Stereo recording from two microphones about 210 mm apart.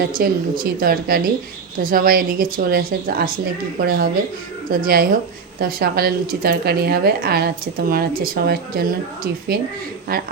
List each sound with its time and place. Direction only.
0.0 s speech: 45° right (ahead or behind)